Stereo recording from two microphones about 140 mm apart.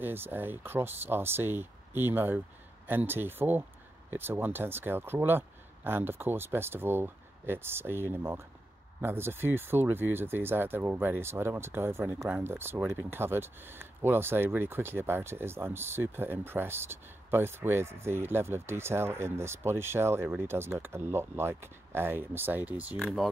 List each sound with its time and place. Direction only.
0.0 s speech: 15° right (ahead or behind)
22.9 s speech: centre (ahead or behind)